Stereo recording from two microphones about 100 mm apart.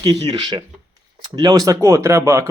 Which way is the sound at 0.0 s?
45° right (ahead or behind).